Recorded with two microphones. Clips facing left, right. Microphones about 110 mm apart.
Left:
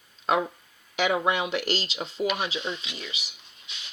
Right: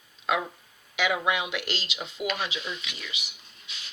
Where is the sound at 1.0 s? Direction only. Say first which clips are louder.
Left 2 dB; 35° left (ahead or behind).